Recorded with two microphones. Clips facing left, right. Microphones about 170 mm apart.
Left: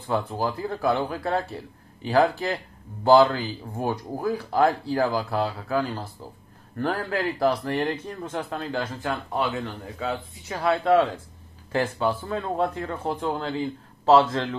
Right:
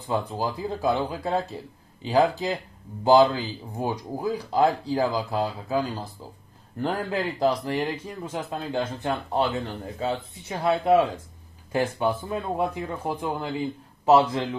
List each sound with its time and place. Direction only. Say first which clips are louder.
0.4 s speech: left 1 dB; 15° right (ahead or behind)